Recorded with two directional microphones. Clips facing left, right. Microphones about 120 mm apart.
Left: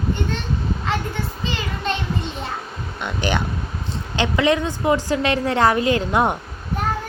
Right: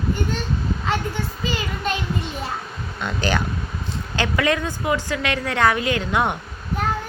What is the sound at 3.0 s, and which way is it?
A woman's voice, 20° left (ahead or behind).